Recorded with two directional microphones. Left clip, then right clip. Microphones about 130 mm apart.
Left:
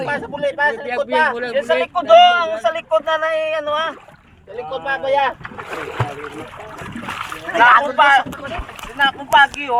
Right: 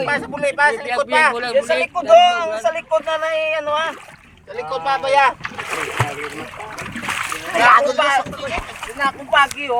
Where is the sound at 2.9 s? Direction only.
15° right (ahead or behind).